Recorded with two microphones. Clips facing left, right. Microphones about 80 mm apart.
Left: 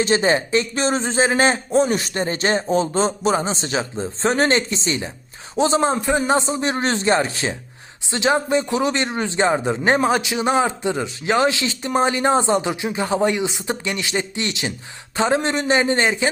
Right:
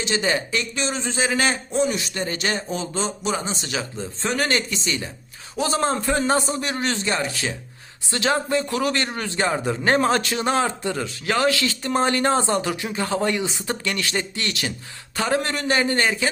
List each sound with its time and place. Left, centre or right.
0.0 s speech: left
2.2 s speech: left